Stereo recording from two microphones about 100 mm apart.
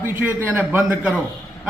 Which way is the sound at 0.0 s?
20° right (ahead or behind).